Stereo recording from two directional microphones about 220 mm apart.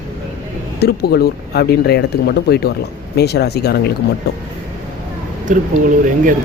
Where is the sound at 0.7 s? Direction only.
45° left (ahead or behind).